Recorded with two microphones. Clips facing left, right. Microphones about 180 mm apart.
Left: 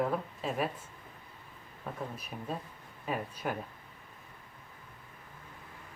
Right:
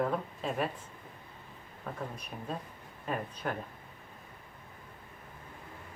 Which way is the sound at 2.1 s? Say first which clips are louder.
Even; 5° left (ahead or behind).